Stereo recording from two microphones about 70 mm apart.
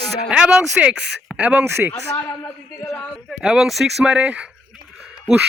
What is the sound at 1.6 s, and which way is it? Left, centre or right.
Speech, right.